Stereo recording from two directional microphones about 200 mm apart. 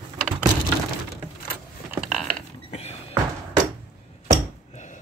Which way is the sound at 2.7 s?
30° left (ahead or behind).